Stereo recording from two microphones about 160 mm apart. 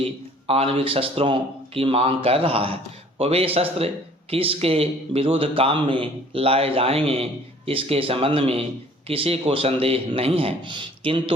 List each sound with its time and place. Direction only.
0.0 s speech: 40° right (ahead or behind)